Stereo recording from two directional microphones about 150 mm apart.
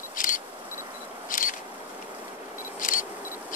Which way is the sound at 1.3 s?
65° left (ahead or behind).